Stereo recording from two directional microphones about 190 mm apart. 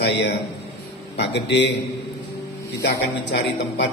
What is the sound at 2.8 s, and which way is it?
A man's voice, 65° left (ahead or behind).